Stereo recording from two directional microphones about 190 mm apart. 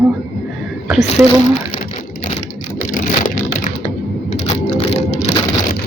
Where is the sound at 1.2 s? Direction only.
Centre (ahead or behind).